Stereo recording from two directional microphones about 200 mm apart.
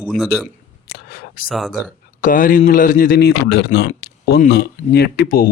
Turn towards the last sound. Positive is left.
turn(degrees=45)  # may be behind; listen again after turning